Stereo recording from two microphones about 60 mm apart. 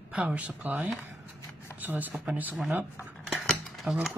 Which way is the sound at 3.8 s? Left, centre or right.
Centre.